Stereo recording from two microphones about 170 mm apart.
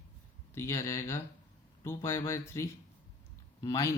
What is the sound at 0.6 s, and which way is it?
Speech, 15° left (ahead or behind).